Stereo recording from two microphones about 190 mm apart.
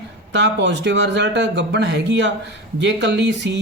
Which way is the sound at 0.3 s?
65° right (ahead or behind).